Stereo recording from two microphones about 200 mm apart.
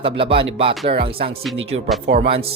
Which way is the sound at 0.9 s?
40° right (ahead or behind).